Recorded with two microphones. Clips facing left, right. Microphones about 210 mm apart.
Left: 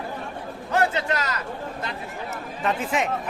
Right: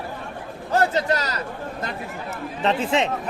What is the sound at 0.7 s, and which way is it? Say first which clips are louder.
Speech: right 3 dB; 40° right (ahead or behind).